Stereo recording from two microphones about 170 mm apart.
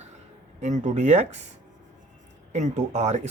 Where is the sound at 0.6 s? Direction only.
45° right (ahead or behind).